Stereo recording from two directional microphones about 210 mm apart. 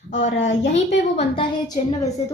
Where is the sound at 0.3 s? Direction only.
60° left (ahead or behind).